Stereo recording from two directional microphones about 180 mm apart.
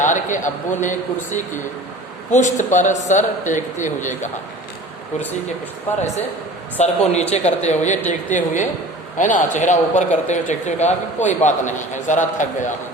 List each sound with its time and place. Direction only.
0.0 s speech: 45° left (ahead or behind)
6.7 s speech: 40° left (ahead or behind)